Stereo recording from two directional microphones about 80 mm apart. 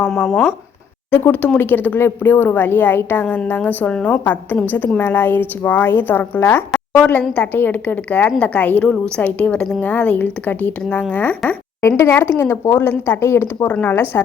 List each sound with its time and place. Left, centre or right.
0.1 s speech: centre
1.1 s a woman's voice: left
7.0 s a woman's voice: centre
11.8 s speech: left
13.6 s a woman's voice: centre